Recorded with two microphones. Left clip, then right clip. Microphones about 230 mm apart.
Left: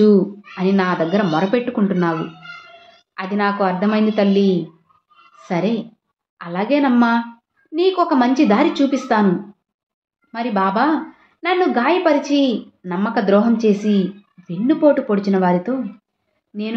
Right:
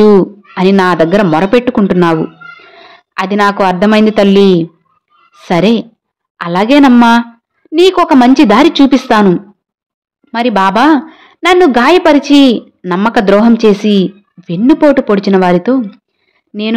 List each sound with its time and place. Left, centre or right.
0.6 s a woman's voice: right
3.2 s a woman's voice: right